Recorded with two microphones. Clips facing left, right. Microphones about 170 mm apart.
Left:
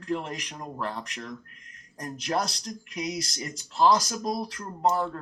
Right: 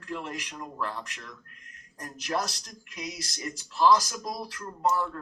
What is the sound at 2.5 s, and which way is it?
Speech, 20° left (ahead or behind).